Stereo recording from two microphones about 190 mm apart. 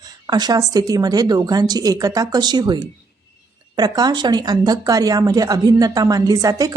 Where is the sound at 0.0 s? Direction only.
20° right (ahead or behind).